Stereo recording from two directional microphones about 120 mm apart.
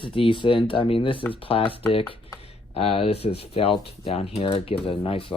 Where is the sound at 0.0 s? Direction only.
45° left (ahead or behind).